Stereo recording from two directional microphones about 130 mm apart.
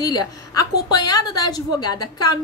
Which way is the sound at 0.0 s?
30° left (ahead or behind).